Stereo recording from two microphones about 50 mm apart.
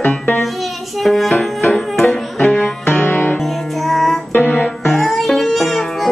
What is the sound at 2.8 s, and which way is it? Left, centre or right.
Music, left.